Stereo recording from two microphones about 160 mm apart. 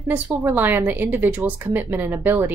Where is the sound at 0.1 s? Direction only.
15° right (ahead or behind).